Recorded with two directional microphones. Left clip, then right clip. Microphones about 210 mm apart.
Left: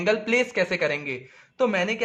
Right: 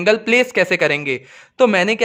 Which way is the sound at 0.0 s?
45° right (ahead or behind).